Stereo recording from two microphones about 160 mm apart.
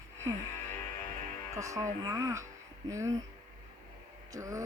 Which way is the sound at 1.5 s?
20° right (ahead or behind).